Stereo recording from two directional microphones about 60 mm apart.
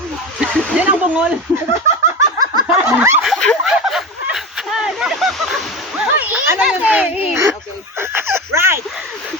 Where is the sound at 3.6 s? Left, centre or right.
Centre.